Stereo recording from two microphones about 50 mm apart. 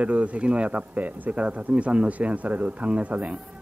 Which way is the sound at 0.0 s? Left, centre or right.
Right.